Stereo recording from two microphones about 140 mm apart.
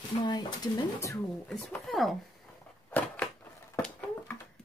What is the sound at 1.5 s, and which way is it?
Speech, centre (ahead or behind).